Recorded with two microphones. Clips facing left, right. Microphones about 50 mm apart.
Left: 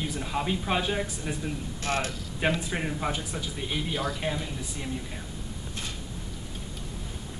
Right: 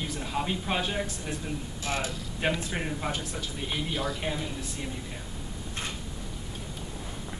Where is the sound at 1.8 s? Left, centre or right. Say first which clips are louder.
Left 2 dB; left.